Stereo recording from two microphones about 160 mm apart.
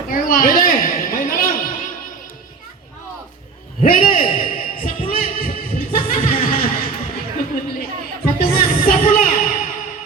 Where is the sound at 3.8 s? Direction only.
60° left (ahead or behind).